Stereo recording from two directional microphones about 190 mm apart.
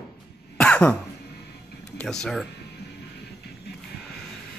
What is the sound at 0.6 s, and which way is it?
Throat clearing, 5° left (ahead or behind).